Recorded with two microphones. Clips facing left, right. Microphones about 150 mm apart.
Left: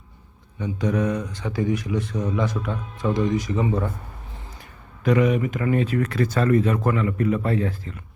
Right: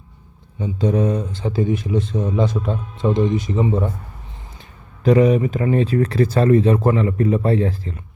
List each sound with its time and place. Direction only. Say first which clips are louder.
0.6 s speech: right 4 dB; 30° right (ahead or behind)
5.0 s speech: right 5 dB; 30° right (ahead or behind)